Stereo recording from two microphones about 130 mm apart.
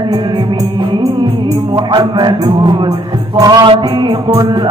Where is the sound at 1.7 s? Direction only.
35° right (ahead or behind).